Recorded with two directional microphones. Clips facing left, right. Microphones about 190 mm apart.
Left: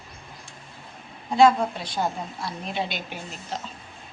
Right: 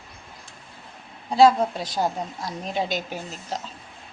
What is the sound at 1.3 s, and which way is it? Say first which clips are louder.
A woman's voice: right 1 dB; 40° right (ahead or behind).